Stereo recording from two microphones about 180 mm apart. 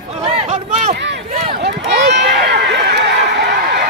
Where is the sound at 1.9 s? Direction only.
70° right (ahead or behind).